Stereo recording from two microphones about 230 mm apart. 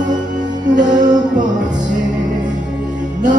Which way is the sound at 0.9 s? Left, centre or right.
Centre.